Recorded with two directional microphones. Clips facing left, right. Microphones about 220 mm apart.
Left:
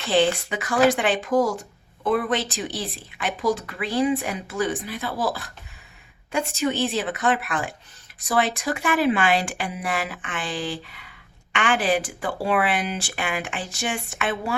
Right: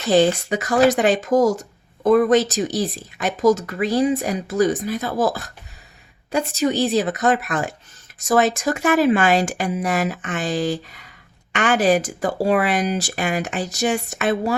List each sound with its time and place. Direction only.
0.1 s speech: 40° right (ahead or behind)